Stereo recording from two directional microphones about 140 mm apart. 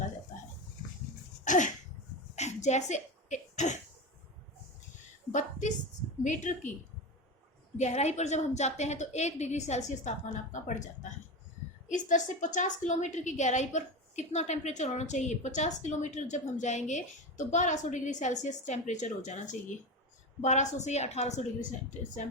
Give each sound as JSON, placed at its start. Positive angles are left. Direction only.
{"t": 1.5, "sound": "a sound", "side_deg": 65}
{"t": 5.3, "sound": "a woman's voice", "side_deg": 60}
{"t": 7.8, "sound": "a woman's voice", "side_deg": 55}